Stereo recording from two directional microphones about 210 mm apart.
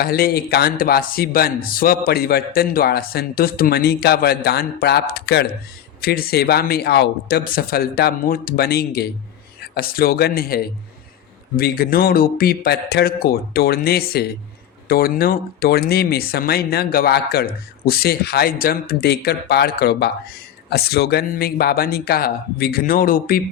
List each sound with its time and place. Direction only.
0.0 s speech: 45° left (ahead or behind)